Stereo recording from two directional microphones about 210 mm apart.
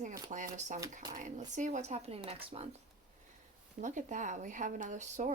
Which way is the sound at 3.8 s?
35° right (ahead or behind).